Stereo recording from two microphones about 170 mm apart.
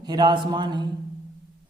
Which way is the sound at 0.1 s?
25° right (ahead or behind).